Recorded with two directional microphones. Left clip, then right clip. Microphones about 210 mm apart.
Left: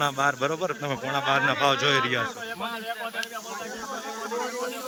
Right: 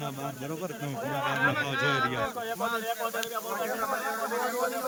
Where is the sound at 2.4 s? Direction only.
40° right (ahead or behind).